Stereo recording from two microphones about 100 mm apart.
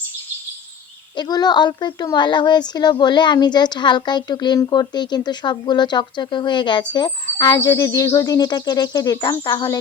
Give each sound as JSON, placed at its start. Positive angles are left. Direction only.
{"t": 1.1, "sound": "a woman's voice", "side_deg": 45}